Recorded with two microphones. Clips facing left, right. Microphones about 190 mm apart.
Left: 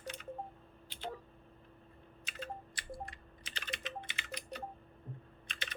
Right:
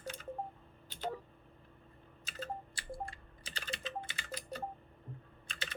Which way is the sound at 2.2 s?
30° right (ahead or behind).